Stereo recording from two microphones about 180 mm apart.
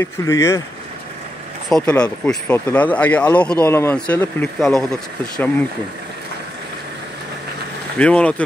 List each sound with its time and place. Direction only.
0.0 s speech: 15° left (ahead or behind)
1.7 s speech: 5° left (ahead or behind)
8.0 s speech: 5° left (ahead or behind)